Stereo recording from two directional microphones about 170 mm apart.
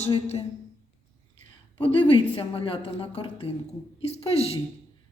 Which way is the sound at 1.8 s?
35° left (ahead or behind).